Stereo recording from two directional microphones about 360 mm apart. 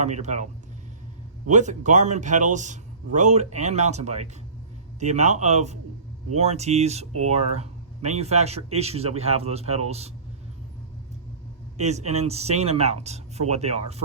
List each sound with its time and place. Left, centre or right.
0.0 s speech: centre
1.5 s speech: centre
11.8 s speech: centre